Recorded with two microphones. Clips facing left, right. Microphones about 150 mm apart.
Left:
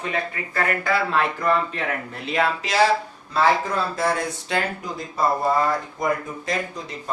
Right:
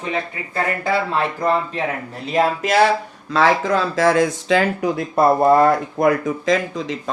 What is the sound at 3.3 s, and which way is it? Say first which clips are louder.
Speech: right 4 dB; 90° right.